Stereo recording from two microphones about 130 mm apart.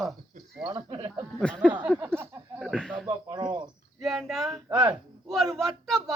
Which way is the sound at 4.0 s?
Centre (ahead or behind).